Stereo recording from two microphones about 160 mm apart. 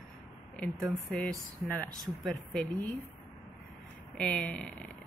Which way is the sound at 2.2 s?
5° left (ahead or behind).